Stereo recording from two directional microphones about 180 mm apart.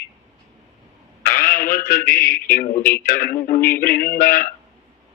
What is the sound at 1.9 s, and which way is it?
A man's voice, 50° left (ahead or behind).